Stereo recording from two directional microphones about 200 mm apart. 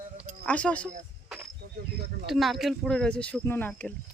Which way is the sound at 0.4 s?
5° left (ahead or behind).